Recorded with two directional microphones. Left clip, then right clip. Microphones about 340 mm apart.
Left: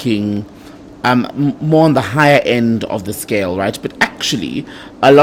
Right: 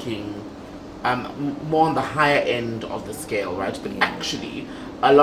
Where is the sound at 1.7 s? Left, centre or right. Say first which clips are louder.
Left 7 dB; left.